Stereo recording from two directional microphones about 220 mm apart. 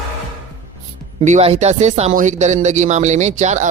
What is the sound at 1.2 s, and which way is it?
Speech, 30° right (ahead or behind).